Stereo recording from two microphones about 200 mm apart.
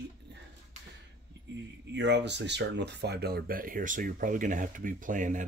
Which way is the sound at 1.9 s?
60° right (ahead or behind).